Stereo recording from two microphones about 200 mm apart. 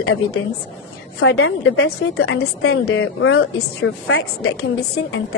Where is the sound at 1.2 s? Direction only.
70° left (ahead or behind); by 1.9 s 90° left.